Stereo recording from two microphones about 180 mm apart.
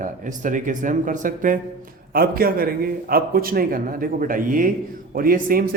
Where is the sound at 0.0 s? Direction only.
45° right (ahead or behind).